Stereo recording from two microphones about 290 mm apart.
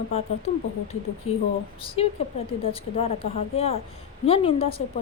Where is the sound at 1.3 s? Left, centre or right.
Left.